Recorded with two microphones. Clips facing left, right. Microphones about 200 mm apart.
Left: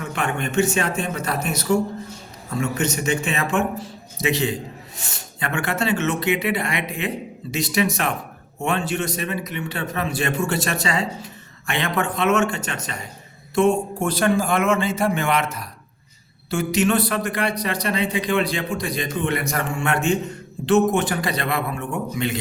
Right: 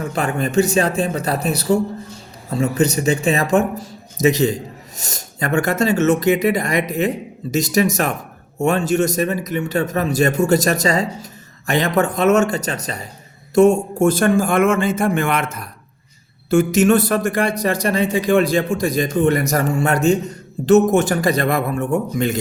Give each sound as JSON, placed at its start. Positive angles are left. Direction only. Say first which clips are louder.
{"t": 0.0, "sound": "a man's voice", "louder": "right 5 dB", "side_deg": -35}